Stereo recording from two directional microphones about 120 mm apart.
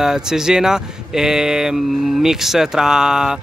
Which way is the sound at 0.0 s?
5° right (ahead or behind).